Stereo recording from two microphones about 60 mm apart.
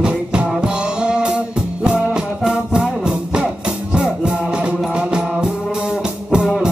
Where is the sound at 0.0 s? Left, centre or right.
Centre.